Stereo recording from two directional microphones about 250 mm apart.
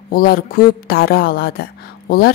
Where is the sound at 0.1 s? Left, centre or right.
Left.